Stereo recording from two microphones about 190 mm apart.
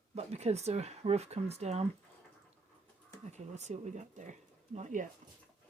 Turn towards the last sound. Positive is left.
turn(degrees=-40)  # may be behind; listen again after turning